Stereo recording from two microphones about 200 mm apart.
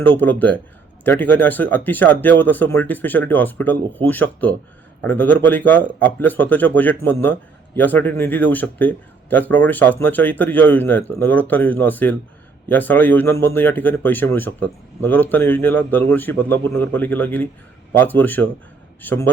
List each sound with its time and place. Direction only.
0.0 s speech: 10° left (ahead or behind)